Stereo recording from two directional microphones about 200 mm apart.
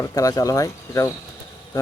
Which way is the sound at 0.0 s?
15° left (ahead or behind).